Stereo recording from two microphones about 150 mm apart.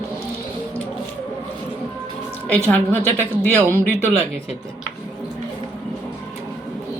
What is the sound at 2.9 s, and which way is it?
Speech, 15° right (ahead or behind).